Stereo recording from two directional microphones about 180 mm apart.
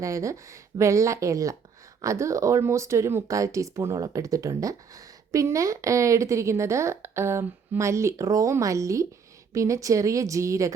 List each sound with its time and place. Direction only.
0.0 s speech: 15° right (ahead or behind)